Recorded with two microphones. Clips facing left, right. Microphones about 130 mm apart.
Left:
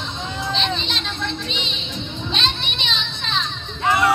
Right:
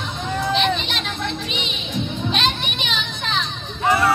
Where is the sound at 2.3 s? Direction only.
10° right (ahead or behind).